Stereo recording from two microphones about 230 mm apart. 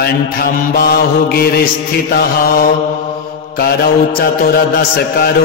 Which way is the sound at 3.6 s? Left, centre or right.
Left.